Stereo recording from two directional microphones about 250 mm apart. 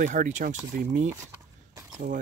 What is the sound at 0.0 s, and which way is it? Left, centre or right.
Speech, right.